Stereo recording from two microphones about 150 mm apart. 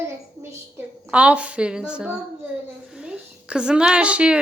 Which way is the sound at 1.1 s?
10° right (ahead or behind).